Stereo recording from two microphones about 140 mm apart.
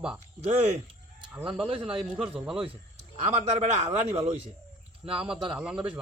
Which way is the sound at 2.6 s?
45° right (ahead or behind).